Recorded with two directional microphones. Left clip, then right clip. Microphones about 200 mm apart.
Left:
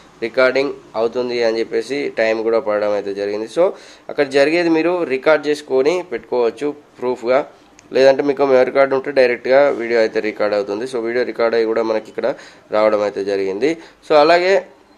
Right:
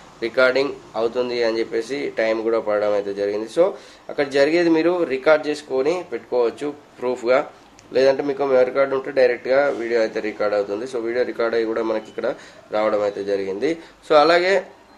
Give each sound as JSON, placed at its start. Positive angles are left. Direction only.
{"t": 0.2, "sound": "a man's voice", "side_deg": 20}